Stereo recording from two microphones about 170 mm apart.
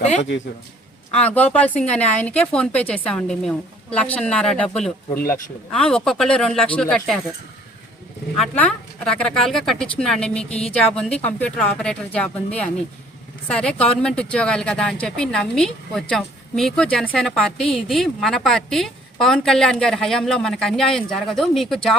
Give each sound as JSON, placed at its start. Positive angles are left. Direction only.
{"t": 0.0, "sound": "a man's voice", "side_deg": 40}
{"t": 1.1, "sound": "a woman's voice", "side_deg": 10}
{"t": 8.4, "sound": "a woman's voice", "side_deg": 5}